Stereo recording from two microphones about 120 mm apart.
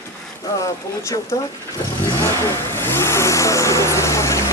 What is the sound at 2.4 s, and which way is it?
Vehicle, 20° left (ahead or behind).